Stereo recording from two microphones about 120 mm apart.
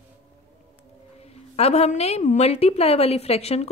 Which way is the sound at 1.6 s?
65° left (ahead or behind).